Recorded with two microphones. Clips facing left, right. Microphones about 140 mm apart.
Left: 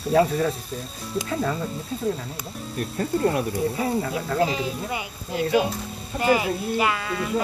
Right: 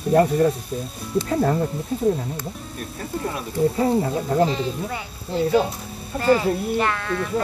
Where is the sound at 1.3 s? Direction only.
45° right (ahead or behind).